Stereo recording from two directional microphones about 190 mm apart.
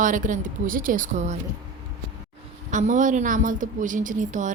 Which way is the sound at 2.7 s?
40° right (ahead or behind).